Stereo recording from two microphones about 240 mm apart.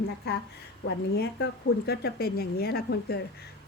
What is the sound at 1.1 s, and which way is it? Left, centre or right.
A woman's voice, left.